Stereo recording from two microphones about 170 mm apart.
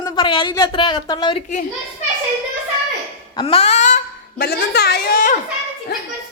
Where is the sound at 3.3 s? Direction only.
30° left (ahead or behind).